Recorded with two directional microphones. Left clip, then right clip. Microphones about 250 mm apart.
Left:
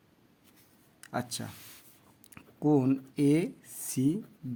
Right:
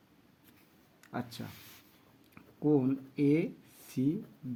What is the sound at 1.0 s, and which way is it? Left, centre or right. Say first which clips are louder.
Speech: left 5 dB; left.